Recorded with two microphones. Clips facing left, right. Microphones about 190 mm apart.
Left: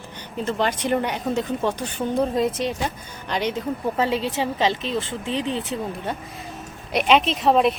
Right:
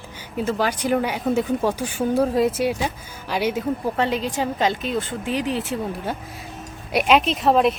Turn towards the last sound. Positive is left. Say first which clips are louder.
# right 1 dB
turn(degrees=0)  # may be behind; listen again after turning